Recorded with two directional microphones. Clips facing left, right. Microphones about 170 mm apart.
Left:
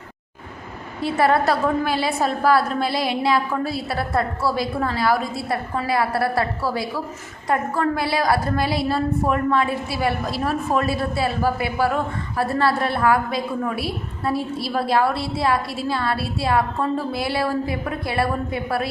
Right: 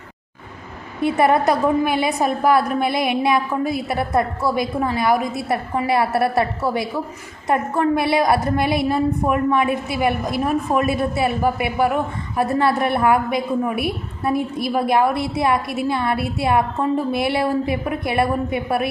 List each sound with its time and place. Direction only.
1.0 s a woman's voice: 20° right (ahead or behind)